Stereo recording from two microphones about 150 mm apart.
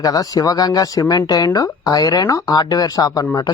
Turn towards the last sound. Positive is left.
turn(degrees=25)  # may be behind; listen again after turning